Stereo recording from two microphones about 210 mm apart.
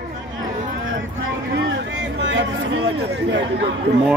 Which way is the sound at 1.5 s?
60° right (ahead or behind).